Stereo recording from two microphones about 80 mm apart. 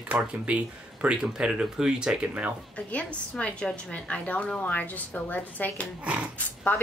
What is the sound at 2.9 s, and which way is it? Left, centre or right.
A woman's voice, centre.